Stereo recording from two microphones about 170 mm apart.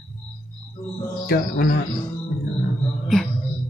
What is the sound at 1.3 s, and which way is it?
Speech, 65° left (ahead or behind).